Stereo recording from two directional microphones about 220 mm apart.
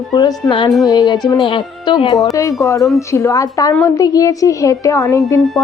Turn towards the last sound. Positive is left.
turn(degrees=15)  # may be behind; listen again after turning